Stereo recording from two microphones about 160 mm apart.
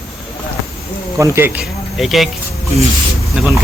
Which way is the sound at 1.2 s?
15° right (ahead or behind).